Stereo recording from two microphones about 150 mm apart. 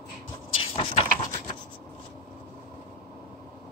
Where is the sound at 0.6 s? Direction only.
40° left (ahead or behind).